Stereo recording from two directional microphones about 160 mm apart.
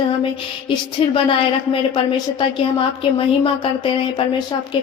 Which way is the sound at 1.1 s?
35° left (ahead or behind).